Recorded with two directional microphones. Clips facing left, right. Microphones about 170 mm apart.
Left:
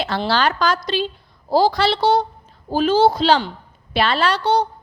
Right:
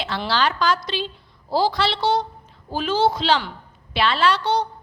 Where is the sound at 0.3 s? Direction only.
40° left (ahead or behind).